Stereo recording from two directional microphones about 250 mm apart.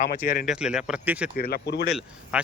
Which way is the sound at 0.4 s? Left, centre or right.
Centre.